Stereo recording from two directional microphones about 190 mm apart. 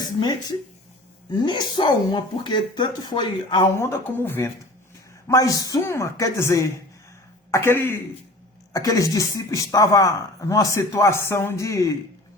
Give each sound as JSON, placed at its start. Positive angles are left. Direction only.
{"t": 1.3, "sound": "speech", "side_deg": 20}